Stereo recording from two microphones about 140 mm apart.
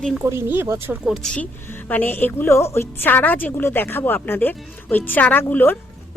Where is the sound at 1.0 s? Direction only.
Centre (ahead or behind).